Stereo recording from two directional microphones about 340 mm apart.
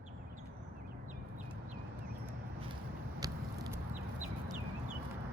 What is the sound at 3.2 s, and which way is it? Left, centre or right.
Vehicle, centre.